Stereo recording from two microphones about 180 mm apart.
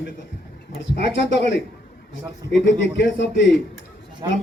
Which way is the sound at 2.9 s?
80° left.